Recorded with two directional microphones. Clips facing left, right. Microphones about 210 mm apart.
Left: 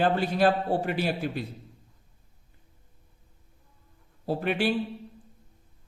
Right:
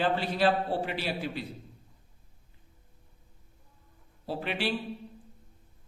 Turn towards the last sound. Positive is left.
turn(degrees=45)  # may be behind; listen again after turning